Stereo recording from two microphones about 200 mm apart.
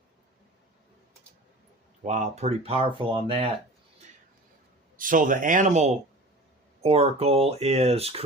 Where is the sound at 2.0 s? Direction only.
35° right (ahead or behind).